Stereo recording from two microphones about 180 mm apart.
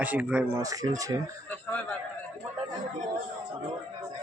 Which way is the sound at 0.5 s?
20° right (ahead or behind).